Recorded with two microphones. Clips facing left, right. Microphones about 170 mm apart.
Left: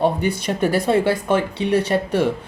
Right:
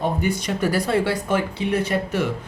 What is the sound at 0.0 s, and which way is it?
Speech, 30° left (ahead or behind).